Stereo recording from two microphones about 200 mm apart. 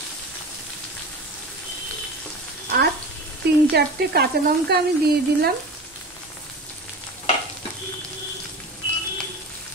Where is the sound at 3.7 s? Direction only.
55° right (ahead or behind).